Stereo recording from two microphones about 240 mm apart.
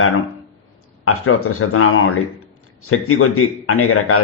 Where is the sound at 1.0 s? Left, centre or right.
Left.